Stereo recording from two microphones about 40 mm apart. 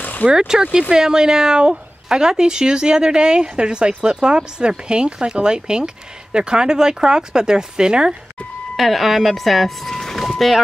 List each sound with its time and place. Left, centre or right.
0.2 s a woman's voice: right
8.7 s speech: centre